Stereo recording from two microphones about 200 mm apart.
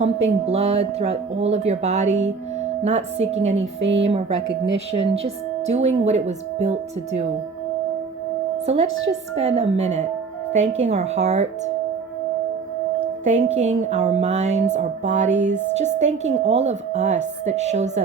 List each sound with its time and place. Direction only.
0.0 s a woman's voice: 30° right (ahead or behind)
3.8 s a woman's voice: 65° right (ahead or behind)
4.9 s a woman's voice: 30° right (ahead or behind)
8.6 s a woman's voice: 30° right (ahead or behind)
10.6 s a woman's voice: 70° right (ahead or behind)
10.8 s a woman's voice: 35° right (ahead or behind)
13.2 s a woman's voice: 35° right (ahead or behind)